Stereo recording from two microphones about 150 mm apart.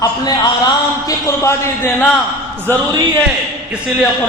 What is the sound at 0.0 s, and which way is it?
A man's voice, 25° left (ahead or behind).